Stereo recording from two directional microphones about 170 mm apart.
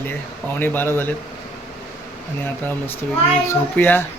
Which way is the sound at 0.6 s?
10° left (ahead or behind).